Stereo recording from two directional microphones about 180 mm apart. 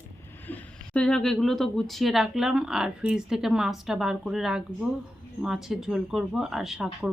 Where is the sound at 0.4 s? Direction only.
10° left (ahead or behind).